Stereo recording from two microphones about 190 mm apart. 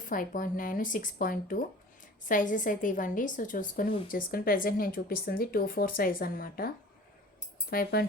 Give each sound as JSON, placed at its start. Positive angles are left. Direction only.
{"t": 0.0, "sound": "speech", "side_deg": 45}
{"t": 7.7, "sound": "speech", "side_deg": 50}